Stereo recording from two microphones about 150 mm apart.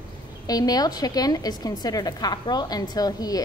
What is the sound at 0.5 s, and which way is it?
A woman's voice, 25° left (ahead or behind).